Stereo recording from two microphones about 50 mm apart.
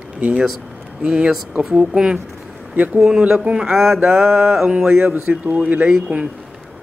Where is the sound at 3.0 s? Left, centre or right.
Centre.